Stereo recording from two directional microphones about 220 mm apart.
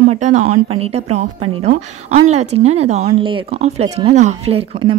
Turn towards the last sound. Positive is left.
turn(degrees=-25)  # may be behind; listen again after turning